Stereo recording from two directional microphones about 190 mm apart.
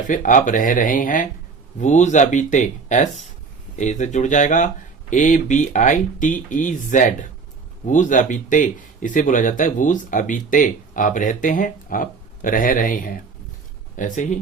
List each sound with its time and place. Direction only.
0.1 s speech: 40° left (ahead or behind)